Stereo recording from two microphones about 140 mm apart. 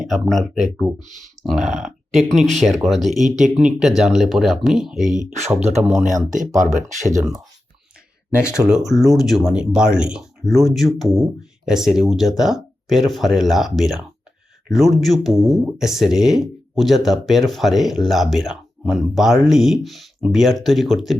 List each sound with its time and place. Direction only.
0.1 s speech: centre (ahead or behind)
6.1 s speech: 65° right (ahead or behind)
8.9 s speech: centre (ahead or behind)